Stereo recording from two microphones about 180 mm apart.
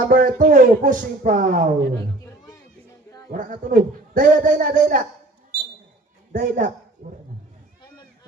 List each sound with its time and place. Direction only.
0.1 s a man's voice: 50° right (ahead or behind)
2.0 s a sound: 20° left (ahead or behind)
3.3 s a man's voice: 45° right (ahead or behind)
6.3 s a man's voice: 45° right (ahead or behind)